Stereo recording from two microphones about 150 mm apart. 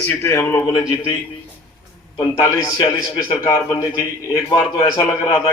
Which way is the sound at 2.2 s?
20° left (ahead or behind).